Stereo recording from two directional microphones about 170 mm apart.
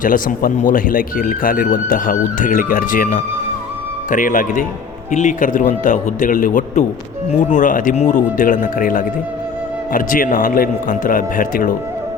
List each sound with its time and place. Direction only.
0.0 s speech: 55° left (ahead or behind)